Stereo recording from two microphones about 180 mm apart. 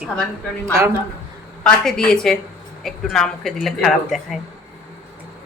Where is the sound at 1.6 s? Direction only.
5° left (ahead or behind).